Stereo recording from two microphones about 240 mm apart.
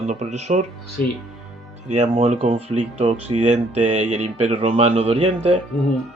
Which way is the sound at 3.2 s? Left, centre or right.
Right.